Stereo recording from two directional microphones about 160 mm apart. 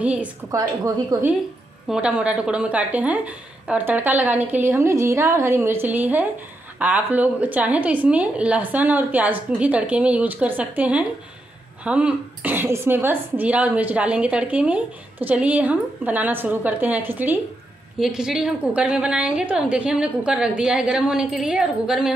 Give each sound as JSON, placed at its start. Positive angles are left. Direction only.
{"t": 0.0, "sound": "speech", "side_deg": -10}
{"t": 0.5, "sound": "a woman's voice", "side_deg": -20}
{"t": 1.9, "sound": "a woman's voice", "side_deg": -5}